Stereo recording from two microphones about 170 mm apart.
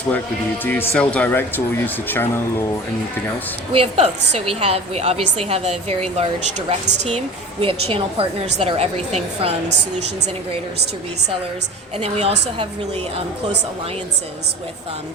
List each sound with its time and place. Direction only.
0.6 s speech: 10° left (ahead or behind)
3.7 s a woman's voice: 35° right (ahead or behind)
11.9 s a woman's voice: 35° right (ahead or behind)